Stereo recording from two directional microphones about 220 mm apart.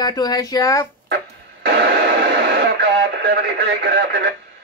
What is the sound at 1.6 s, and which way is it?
Radio, 45° right (ahead or behind).